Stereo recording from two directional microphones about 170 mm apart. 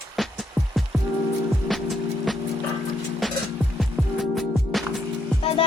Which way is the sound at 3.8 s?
Centre (ahead or behind).